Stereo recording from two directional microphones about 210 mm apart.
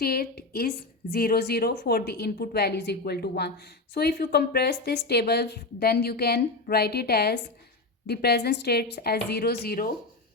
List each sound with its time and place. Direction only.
0.0 s a woman's voice: 45° left (ahead or behind)